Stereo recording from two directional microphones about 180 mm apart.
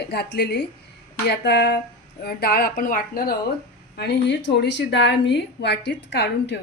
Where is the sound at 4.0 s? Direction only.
70° left (ahead or behind).